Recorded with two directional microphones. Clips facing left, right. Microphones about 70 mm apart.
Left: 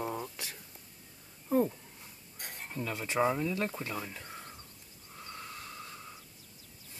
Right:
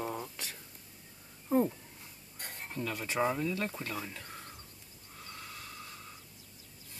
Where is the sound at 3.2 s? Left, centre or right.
Centre.